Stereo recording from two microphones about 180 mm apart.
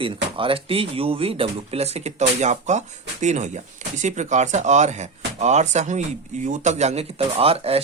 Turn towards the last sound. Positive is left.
turn(degrees=-35)  # may be behind; listen again after turning